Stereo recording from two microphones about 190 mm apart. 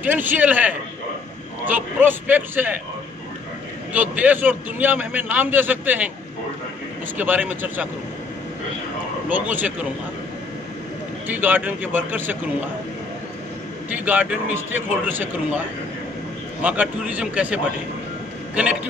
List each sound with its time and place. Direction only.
0.0 s a man's voice: 10° right (ahead or behind)
3.9 s a man's voice: 10° right (ahead or behind)
7.2 s a man's voice: 10° right (ahead or behind)
9.3 s a man's voice: 10° right (ahead or behind)
11.2 s a man's voice: 10° right (ahead or behind)
13.8 s a man's voice: 10° right (ahead or behind)
16.6 s a man's voice: 5° right (ahead or behind)